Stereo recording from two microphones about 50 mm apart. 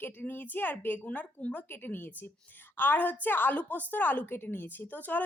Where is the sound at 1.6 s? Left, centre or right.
Left.